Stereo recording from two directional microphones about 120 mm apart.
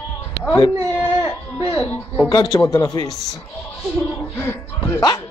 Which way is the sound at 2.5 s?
30° left (ahead or behind).